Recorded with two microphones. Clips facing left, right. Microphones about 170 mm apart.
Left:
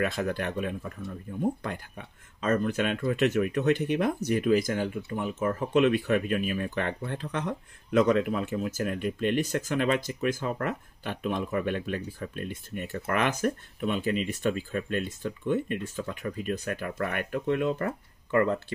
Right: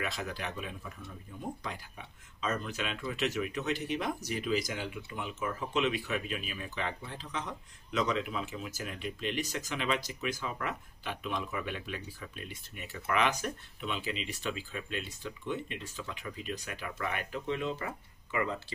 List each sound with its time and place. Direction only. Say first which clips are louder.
0.0 s speech: left 9 dB; 50° left (ahead or behind)